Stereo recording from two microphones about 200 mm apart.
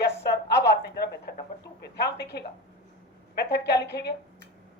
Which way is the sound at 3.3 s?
55° left (ahead or behind).